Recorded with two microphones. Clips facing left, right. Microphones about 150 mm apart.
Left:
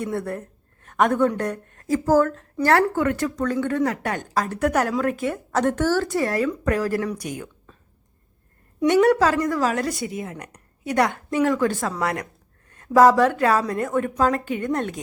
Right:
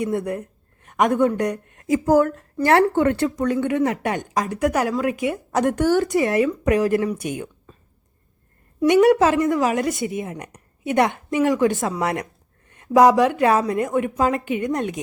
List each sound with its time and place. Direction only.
0.0 s speech: 15° right (ahead or behind)
3.3 s a woman's voice: 15° right (ahead or behind)
7.2 s a woman's voice: 25° right (ahead or behind)
8.9 s a woman's voice: 15° right (ahead or behind)